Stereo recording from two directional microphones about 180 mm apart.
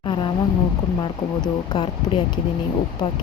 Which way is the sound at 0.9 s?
25° left (ahead or behind).